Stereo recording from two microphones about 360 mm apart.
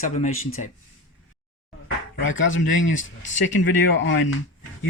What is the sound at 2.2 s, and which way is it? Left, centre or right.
Speech, left.